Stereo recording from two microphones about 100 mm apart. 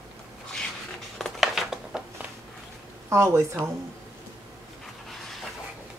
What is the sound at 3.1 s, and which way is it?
Speech, 25° right (ahead or behind).